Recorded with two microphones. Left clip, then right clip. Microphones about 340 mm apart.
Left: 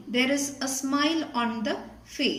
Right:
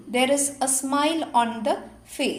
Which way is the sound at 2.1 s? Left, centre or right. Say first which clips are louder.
Right 1 dB; right.